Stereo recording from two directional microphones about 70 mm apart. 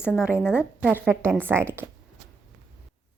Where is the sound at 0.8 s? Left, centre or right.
Right.